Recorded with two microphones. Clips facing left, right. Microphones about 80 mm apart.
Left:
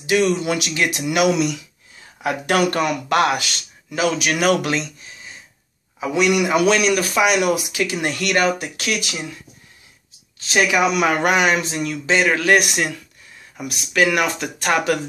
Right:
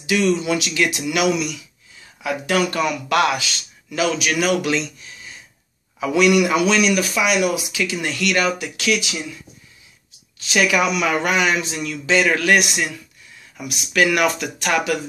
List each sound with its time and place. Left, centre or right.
0.0 s speech: left
0.4 s speech: left
0.7 s speech: left
2.2 s a man's voice: left
3.1 s a man's voice: left
3.9 s speech: left
4.4 s a man's voice: left
5.9 s speech: left
6.5 s a man's voice: left
10.4 s speech: left
10.9 s a man's voice: left
12.2 s speech: left
12.5 s a man's voice: left
13.9 s speech: left